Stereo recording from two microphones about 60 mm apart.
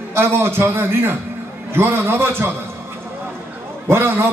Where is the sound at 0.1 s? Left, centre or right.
Right.